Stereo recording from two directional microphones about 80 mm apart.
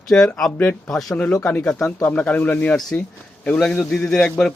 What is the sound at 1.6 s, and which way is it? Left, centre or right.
Speech, centre.